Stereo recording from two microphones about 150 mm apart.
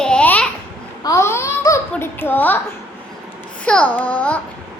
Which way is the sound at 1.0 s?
20° left (ahead or behind).